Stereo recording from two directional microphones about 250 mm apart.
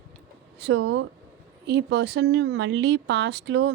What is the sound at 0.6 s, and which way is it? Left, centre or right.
Speech, right.